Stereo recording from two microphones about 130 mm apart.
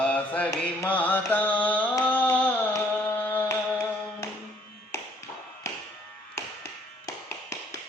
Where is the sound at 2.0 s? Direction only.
10° left (ahead or behind).